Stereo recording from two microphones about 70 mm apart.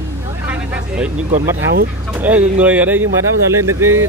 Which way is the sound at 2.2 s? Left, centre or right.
Right.